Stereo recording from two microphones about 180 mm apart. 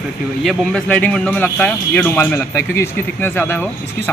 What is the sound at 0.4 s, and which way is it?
Speech, 5° left (ahead or behind).